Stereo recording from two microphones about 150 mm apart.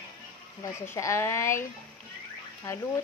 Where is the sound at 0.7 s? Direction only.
20° left (ahead or behind).